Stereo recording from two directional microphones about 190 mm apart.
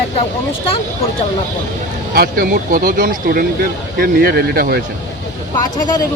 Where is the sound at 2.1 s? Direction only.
50° right (ahead or behind).